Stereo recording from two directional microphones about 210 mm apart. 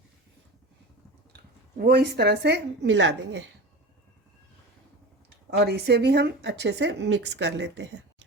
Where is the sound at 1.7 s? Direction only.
45° right (ahead or behind).